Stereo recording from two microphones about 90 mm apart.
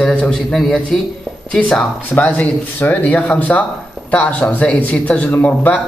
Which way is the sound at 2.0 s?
20° left (ahead or behind).